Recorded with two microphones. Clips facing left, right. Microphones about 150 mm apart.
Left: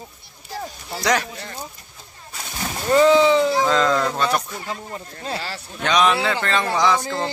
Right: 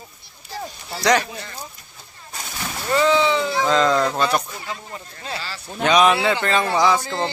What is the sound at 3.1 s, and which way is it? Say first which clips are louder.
Speech: left 4 dB; 35° left (ahead or behind).